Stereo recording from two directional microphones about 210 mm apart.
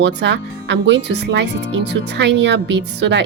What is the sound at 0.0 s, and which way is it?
Speech, 60° right (ahead or behind).